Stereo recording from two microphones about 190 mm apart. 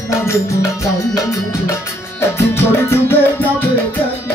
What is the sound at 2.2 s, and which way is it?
Music, 10° left (ahead or behind).